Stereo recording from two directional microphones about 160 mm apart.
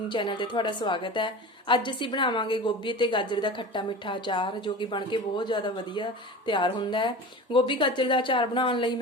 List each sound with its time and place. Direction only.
0.1 s a woman's voice: 30° left (ahead or behind)